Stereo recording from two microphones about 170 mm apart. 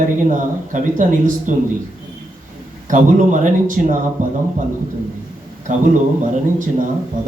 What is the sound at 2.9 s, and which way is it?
Speech, 50° right (ahead or behind).